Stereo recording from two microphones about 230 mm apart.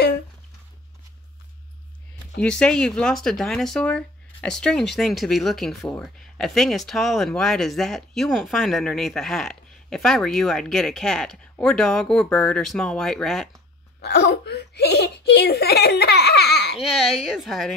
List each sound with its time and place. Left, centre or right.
2.4 s speech: centre
14.0 s speech: left
16.9 s speech: centre